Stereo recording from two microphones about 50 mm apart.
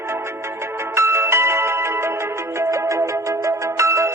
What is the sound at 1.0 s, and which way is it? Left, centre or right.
Music, right.